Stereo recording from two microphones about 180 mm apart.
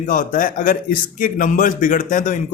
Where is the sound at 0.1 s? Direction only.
45° left (ahead or behind).